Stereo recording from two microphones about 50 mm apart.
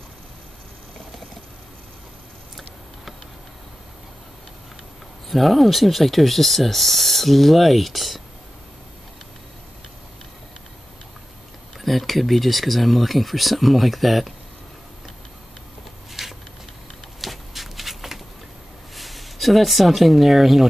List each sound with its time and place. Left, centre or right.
5.3 s speech: centre
11.8 s speech: centre
16.1 s a sound: centre
18.9 s speech: centre